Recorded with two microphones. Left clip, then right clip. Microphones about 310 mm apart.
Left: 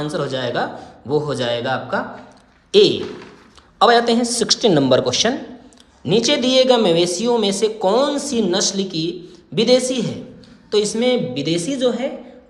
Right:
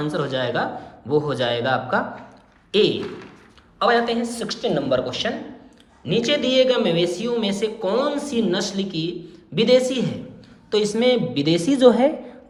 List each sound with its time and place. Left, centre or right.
0.0 s a man's voice: centre